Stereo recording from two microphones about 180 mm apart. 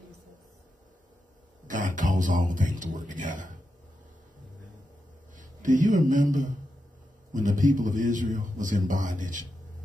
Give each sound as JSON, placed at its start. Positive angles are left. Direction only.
{"t": 1.7, "sound": "a man's voice", "side_deg": -45}
{"t": 5.3, "sound": "a man's voice", "side_deg": -45}